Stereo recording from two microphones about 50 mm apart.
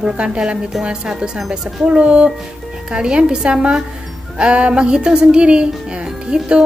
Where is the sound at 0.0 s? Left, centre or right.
Centre.